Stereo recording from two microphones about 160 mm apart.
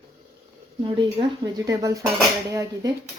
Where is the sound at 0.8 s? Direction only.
30° right (ahead or behind).